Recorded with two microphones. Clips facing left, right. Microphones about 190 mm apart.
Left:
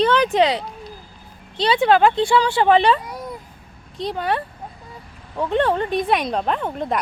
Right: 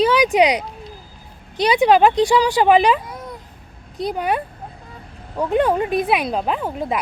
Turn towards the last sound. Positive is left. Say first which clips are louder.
# even
turn(degrees=-5)  # may be behind; listen again after turning